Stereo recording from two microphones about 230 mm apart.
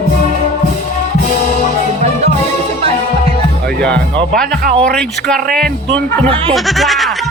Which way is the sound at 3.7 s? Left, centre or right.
Centre.